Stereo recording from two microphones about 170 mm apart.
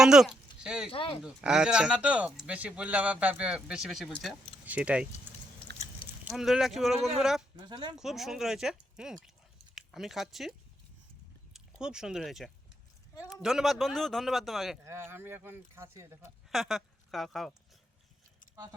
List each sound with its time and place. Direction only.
0.0 s a sound: 5° right (ahead or behind)
0.9 s speech: 30° left (ahead or behind)
1.2 s speech: 5° right (ahead or behind)
6.0 s a sound: 30° left (ahead or behind)
6.3 s speech: centre (ahead or behind)
7.6 s speech: 25° right (ahead or behind)
7.9 s speech: centre (ahead or behind)
11.5 s speech: 5° right (ahead or behind)
14.8 s speech: 15° right (ahead or behind)
16.5 s speech: centre (ahead or behind)